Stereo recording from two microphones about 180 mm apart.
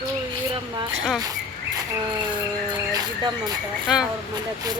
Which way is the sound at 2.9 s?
20° right (ahead or behind).